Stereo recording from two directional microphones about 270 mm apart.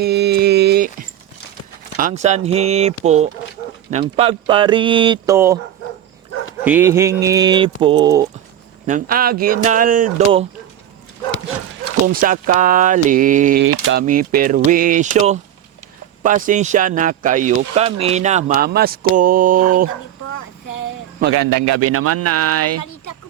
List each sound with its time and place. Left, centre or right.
0.0 s a sound: right
2.0 s a man's voice: right; by 5.5 s centre
6.7 s speech: centre
8.9 s a man's voice: right
12.0 s a man's voice: right
20.2 s child singing: left
21.6 s speech: right
22.8 s a sound: left